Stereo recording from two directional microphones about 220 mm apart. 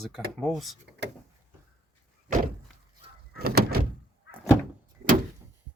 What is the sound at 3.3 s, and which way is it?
Door, 45° right (ahead or behind).